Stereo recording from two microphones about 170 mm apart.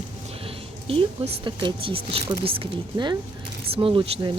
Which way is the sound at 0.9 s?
35° right (ahead or behind).